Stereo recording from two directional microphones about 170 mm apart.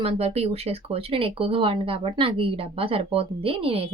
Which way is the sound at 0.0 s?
35° right (ahead or behind).